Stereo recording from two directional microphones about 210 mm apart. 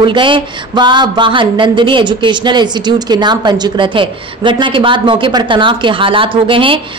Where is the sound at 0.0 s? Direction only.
25° right (ahead or behind).